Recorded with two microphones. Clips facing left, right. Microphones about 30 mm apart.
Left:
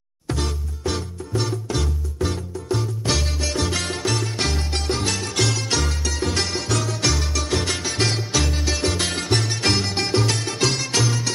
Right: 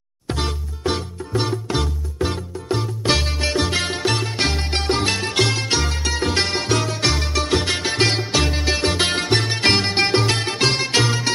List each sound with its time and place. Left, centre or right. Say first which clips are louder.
0.3 s music: right 2 dB; right
7.8 s music: right 4 dB; right